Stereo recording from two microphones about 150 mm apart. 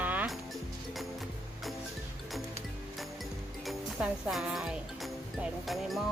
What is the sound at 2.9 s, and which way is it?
Music, centre (ahead or behind).